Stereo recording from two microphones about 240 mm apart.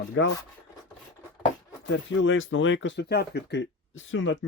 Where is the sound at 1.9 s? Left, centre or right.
Left.